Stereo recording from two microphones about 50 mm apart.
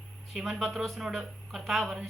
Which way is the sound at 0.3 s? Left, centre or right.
Centre.